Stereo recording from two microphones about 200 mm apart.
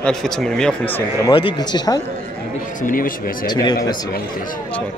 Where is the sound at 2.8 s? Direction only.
45° left (ahead or behind).